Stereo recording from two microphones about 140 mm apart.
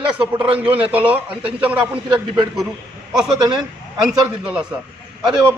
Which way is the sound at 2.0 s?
30° right (ahead or behind).